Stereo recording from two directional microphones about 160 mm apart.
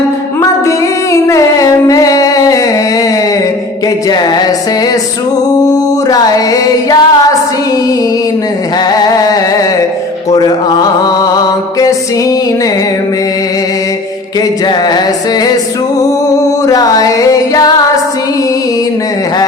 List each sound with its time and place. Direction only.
1.1 s music: 20° left (ahead or behind)
4.1 s a sound: 25° left (ahead or behind)
5.5 s music: 25° left (ahead or behind)
8.9 s a sound: 25° left (ahead or behind)
10.3 s music: 25° left (ahead or behind)
14.7 s music: 25° left (ahead or behind)
16.6 s music: 25° left (ahead or behind)